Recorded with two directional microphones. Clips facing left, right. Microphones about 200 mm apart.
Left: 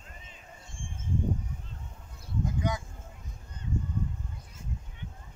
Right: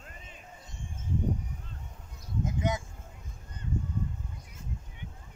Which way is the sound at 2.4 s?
20° right (ahead or behind).